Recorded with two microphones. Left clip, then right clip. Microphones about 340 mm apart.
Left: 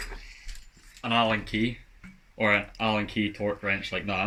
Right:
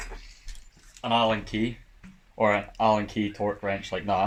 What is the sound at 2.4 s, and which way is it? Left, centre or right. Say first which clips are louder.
Speech: right 2 dB; centre.